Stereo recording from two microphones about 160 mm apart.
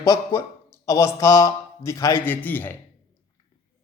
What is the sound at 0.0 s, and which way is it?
Speech, 20° left (ahead or behind).